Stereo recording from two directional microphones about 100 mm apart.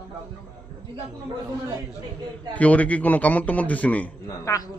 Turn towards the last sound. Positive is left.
turn(degrees=35)  # may be behind; listen again after turning